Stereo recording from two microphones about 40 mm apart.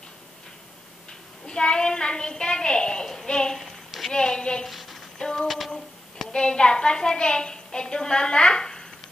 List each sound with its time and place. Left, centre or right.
1.5 s a woman's voice: left
4.6 s a sound: centre
5.2 s female singing: centre
6.3 s a woman's voice: left